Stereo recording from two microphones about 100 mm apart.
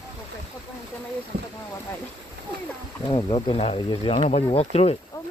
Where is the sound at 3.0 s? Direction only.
50° left (ahead or behind).